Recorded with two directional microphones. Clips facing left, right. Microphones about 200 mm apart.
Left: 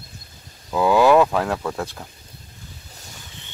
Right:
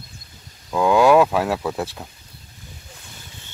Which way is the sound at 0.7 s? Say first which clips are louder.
Right 1 dB; 5° left (ahead or behind).